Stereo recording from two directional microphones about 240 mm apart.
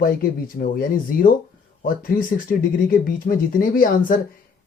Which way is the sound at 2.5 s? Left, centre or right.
Left.